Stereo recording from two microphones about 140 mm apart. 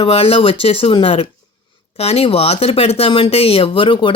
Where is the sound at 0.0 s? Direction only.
40° left (ahead or behind).